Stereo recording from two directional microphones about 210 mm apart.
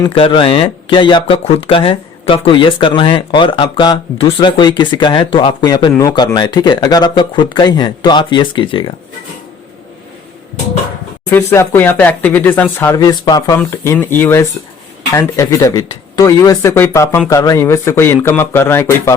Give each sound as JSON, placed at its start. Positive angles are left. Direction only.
{"t": 0.0, "sound": "speech", "side_deg": 25}
{"t": 11.3, "sound": "speech", "side_deg": 10}